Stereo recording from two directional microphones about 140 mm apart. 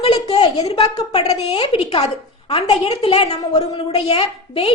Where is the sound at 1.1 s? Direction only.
50° left (ahead or behind).